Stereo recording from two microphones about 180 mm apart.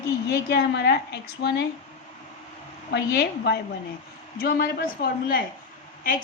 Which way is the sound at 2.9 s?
65° left (ahead or behind).